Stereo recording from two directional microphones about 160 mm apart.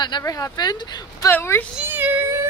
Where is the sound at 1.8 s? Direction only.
10° right (ahead or behind).